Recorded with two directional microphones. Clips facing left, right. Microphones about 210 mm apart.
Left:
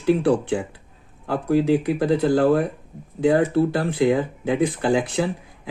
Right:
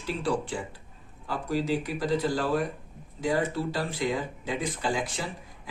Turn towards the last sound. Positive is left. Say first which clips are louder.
# left 12 dB
turn(degrees=60)  # may be behind; listen again after turning